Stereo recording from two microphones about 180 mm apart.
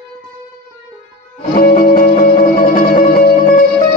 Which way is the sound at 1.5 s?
45° left (ahead or behind).